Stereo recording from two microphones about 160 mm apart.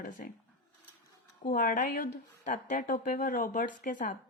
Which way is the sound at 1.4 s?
60° left (ahead or behind).